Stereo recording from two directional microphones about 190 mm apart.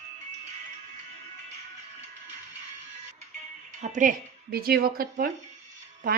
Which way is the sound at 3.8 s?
40° right (ahead or behind).